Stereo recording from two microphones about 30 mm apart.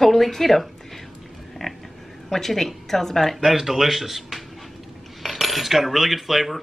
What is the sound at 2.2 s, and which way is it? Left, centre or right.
Speech, centre.